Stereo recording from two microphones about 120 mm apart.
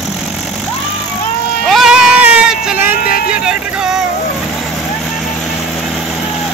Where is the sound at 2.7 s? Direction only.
15° right (ahead or behind).